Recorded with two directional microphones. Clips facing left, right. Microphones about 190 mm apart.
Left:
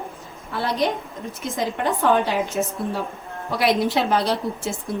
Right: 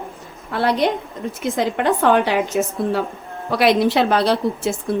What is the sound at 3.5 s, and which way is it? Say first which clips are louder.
A woman's voice: right 5 dB; 75° right (ahead or behind).